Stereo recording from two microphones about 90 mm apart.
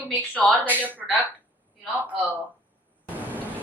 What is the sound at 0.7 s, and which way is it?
Speech, 20° right (ahead or behind).